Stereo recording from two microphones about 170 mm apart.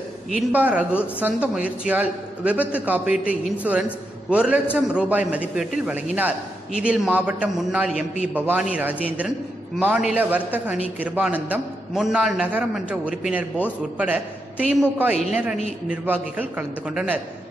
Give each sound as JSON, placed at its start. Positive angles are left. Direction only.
{"t": 0.3, "sound": "speech", "side_deg": -10}